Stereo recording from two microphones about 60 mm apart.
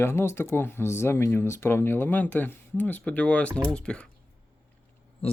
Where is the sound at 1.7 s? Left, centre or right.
Left.